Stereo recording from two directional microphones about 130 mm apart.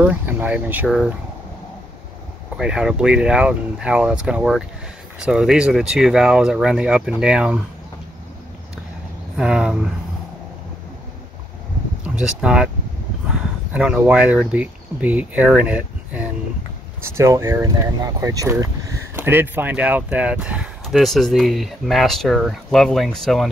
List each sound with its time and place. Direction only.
0.0 s speech: 15° right (ahead or behind)
0.8 s speech: centre (ahead or behind)
2.5 s speech: 5° right (ahead or behind)
9.4 s speech: 5° right (ahead or behind)
12.0 s speech: 5° right (ahead or behind)
17.2 s speech: 20° right (ahead or behind)
19.1 s speech: 15° right (ahead or behind); by 23.5 s centre (ahead or behind)